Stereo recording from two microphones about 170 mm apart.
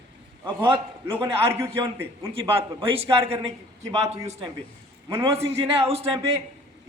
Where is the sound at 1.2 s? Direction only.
15° right (ahead or behind).